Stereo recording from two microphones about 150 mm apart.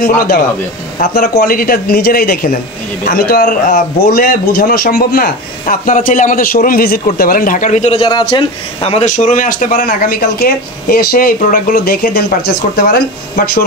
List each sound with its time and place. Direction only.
1.1 s speech: 90° left; by 8.1 s 45° left (ahead or behind)
8.1 s speech: 30° left (ahead or behind)
9.1 s speech: 60° left (ahead or behind); by 13.0 s 90° left